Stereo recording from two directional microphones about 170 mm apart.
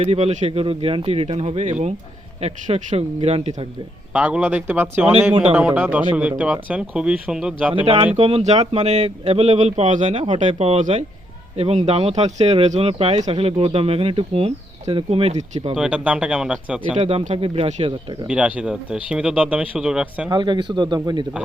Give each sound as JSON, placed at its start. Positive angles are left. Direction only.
{"t": 0.0, "sound": "speech", "side_deg": -40}
{"t": 4.1, "sound": "speech", "side_deg": -10}
{"t": 8.1, "sound": "speech", "side_deg": -35}
{"t": 15.7, "sound": "speech", "side_deg": -5}
{"t": 17.0, "sound": "speech", "side_deg": -35}
{"t": 18.3, "sound": "speech", "side_deg": -5}
{"t": 20.3, "sound": "speech", "side_deg": -25}